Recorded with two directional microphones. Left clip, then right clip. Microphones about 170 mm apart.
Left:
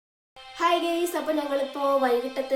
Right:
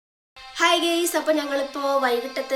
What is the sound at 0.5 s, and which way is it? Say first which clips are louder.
A woman's voice: right 4 dB; 10° left (ahead or behind).